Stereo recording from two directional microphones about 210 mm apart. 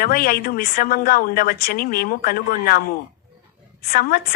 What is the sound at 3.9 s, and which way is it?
Speech, 45° left (ahead or behind).